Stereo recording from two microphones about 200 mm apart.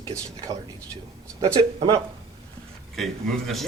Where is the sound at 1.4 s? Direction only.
20° right (ahead or behind).